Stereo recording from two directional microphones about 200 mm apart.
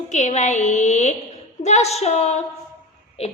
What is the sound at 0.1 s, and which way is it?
A woman's voice, 35° left (ahead or behind).